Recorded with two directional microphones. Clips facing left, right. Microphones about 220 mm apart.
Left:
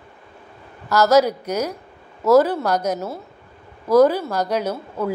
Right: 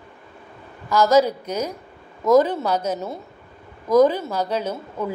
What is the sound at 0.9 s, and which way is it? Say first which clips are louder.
A woman's voice: left 1 dB; 10° left (ahead or behind).